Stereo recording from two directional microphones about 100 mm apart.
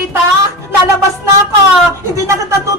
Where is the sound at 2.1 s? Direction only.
30° right (ahead or behind).